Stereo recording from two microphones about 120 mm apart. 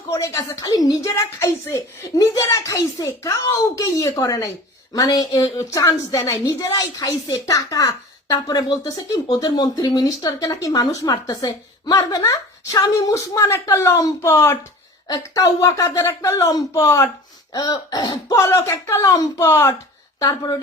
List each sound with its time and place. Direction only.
0.1 s a woman's voice: 30° left (ahead or behind)
15.0 s a woman's voice: 30° left (ahead or behind)
20.1 s speech: 30° left (ahead or behind)